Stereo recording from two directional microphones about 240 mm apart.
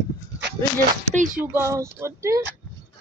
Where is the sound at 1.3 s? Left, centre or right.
Centre.